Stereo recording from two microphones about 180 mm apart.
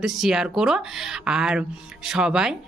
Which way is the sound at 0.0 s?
Centre (ahead or behind).